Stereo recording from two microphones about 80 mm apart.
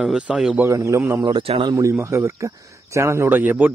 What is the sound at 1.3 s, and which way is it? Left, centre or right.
Speech, right.